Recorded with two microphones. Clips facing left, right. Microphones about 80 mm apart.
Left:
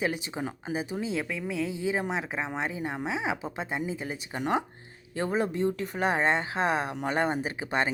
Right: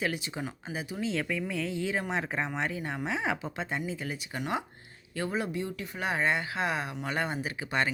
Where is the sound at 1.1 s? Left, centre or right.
Centre.